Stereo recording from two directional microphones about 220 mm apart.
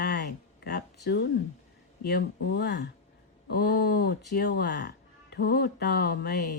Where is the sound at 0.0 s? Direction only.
45° left (ahead or behind).